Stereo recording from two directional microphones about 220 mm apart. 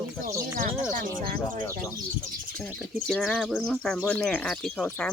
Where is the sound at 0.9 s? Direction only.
40° right (ahead or behind).